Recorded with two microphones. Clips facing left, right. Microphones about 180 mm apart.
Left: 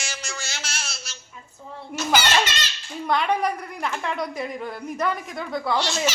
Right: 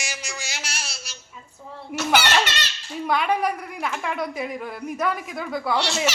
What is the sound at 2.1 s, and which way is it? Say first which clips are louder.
Laughter: even; 65° right (ahead or behind).